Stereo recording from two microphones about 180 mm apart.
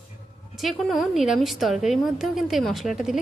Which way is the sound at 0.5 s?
Centre (ahead or behind).